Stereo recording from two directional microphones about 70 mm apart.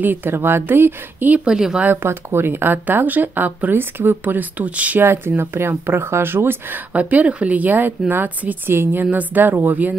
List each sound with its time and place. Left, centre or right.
0.0 s speech: right; by 1.8 s centre
2.0 s speech: right
5.0 s speech: right
6.9 s speech: right